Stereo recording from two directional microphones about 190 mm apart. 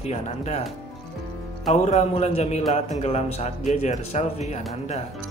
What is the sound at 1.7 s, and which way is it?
A man's voice, 35° left (ahead or behind).